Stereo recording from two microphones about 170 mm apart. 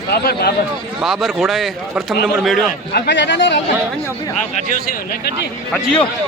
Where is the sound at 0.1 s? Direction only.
65° left (ahead or behind).